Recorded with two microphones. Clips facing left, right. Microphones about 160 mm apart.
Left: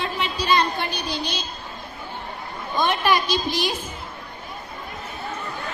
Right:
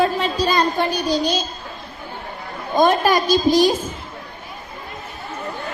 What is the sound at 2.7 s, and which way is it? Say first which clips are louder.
A woman's voice: right 6 dB; 45° right (ahead or behind).